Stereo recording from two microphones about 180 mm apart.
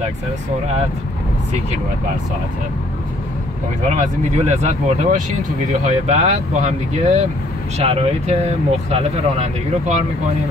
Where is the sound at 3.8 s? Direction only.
40° right (ahead or behind).